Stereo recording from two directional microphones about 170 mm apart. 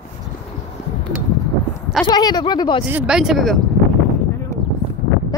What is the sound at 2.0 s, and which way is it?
Speech, 25° left (ahead or behind).